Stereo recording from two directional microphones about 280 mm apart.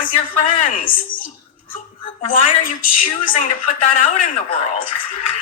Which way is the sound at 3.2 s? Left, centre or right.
Left.